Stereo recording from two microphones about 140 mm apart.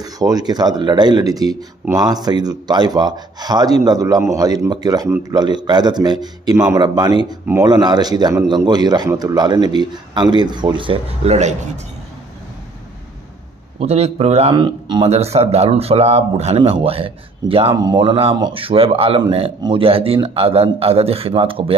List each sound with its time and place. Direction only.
0.0 s speech: 25° right (ahead or behind)
11.3 s a man's voice: 55° right (ahead or behind)
13.7 s speech: 50° right (ahead or behind)
15.0 s speech: 50° right (ahead or behind)